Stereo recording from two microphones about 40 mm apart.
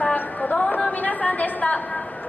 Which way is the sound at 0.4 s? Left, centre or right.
Left.